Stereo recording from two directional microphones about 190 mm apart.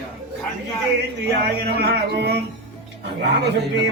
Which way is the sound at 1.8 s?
60° right (ahead or behind).